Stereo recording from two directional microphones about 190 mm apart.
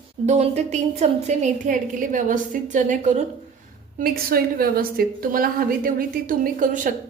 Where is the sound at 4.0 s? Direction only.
50° right (ahead or behind).